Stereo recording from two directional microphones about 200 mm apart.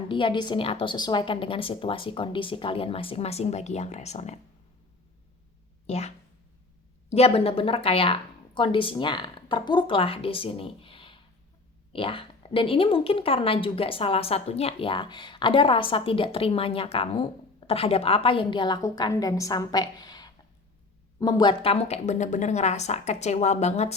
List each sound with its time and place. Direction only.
0.1 s speech: 25° left (ahead or behind)
5.8 s speech: 30° left (ahead or behind)